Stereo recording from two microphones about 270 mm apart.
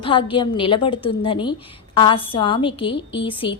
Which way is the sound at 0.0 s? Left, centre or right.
Centre.